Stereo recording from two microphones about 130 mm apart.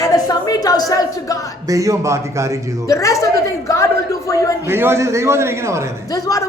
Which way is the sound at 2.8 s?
25° left (ahead or behind).